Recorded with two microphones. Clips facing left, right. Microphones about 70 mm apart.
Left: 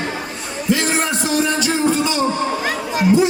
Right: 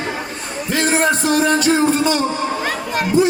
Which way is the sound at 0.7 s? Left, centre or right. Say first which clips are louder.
Right 2 dB; right.